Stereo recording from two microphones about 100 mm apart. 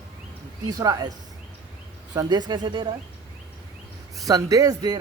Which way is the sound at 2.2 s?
45° right (ahead or behind).